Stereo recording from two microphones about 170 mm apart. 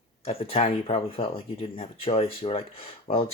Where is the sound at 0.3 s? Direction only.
35° left (ahead or behind).